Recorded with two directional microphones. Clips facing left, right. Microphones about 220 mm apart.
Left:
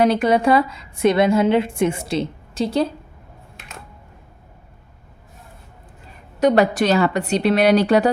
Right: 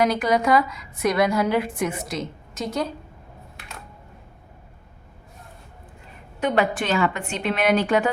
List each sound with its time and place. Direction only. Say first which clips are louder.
0.0 s a woman's voice: left 4 dB; 30° left (ahead or behind)
6.4 s a woman's voice: left 7 dB; 40° left (ahead or behind)